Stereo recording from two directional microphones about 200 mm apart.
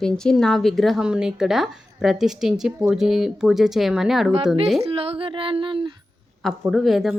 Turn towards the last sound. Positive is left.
turn(degrees=0)  # may be behind; listen again after turning